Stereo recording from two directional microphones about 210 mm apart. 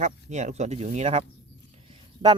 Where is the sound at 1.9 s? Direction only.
20° right (ahead or behind).